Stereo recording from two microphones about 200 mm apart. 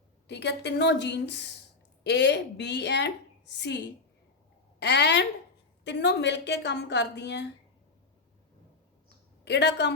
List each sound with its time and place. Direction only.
0.3 s a woman's voice: 60° left (ahead or behind)
9.4 s a woman's voice: 60° left (ahead or behind)